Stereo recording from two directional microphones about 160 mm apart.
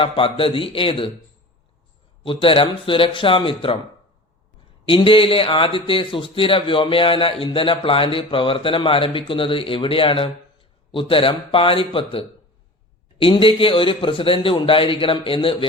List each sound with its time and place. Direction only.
0.0 s a man's voice: 35° left (ahead or behind)
2.2 s a man's voice: 35° left (ahead or behind)
4.9 s a man's voice: 35° left (ahead or behind)